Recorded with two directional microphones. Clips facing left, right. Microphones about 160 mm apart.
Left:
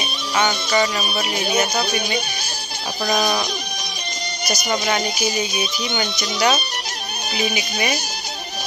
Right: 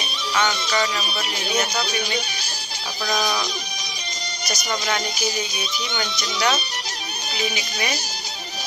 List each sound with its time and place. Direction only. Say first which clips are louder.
0.3 s music: left 3 dB; 20° left (ahead or behind)
1.8 s speech: left 3 dB; 55° left (ahead or behind)
5.9 s speech: left 4 dB; 15° left (ahead or behind)
7.3 s speech: left 4 dB; 55° left (ahead or behind)